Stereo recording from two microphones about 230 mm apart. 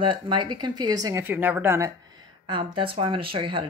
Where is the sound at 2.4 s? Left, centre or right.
Right.